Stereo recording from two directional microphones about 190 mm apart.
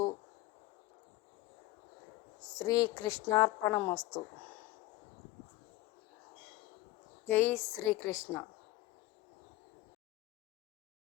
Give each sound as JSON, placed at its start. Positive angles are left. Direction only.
{"t": 2.5, "sound": "a woman's voice", "side_deg": 20}
{"t": 7.3, "sound": "a woman's voice", "side_deg": 10}